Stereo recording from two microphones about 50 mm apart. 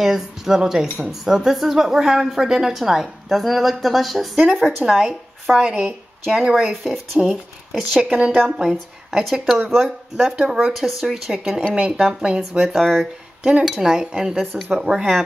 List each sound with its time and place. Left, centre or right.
0.0 s speech: centre
4.9 s speech: centre
6.5 s speech: centre
8.5 s speech: centre
9.8 s speech: centre
10.7 s speech: centre
12.4 s speech: centre
13.4 s speech: right